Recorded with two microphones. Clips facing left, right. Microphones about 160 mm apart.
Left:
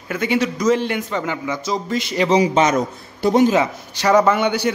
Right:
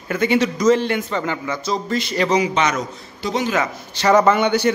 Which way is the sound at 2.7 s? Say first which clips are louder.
Left 5 dB; 55° left (ahead or behind).